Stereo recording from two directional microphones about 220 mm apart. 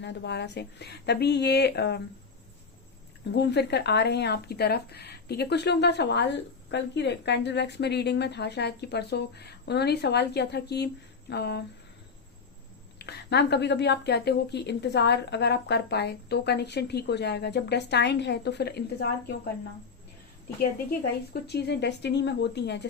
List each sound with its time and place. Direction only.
0.0 s speech: 50° left (ahead or behind)
3.3 s speech: 50° left (ahead or behind)
13.0 s speech: 45° left (ahead or behind)
21.4 s speech: 50° left (ahead or behind)